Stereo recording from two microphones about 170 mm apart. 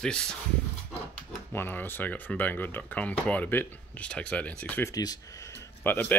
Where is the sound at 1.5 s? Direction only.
10° left (ahead or behind).